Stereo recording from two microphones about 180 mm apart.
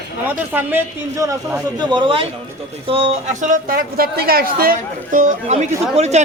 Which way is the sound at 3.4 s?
50° right (ahead or behind).